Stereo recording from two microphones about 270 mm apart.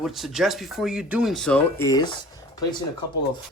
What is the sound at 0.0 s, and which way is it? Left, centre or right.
Speech, centre.